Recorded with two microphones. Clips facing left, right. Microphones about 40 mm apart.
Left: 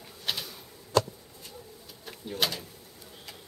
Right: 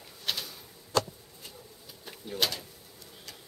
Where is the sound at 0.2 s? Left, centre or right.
Centre.